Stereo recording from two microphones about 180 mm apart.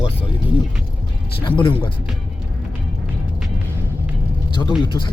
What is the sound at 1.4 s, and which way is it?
Speech, 25° left (ahead or behind).